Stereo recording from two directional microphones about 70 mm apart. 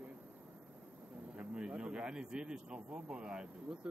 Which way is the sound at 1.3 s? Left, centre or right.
Centre.